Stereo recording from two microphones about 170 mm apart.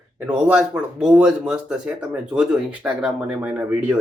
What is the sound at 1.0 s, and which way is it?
Speech, 5° right (ahead or behind).